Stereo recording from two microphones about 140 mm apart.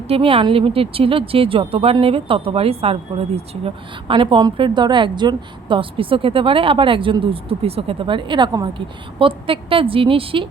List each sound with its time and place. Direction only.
0.1 s a woman's voice: 40° right (ahead or behind)
4.1 s a woman's voice: 35° right (ahead or behind)